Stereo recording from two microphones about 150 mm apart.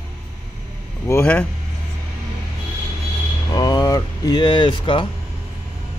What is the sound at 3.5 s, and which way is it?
Speech, 30° left (ahead or behind).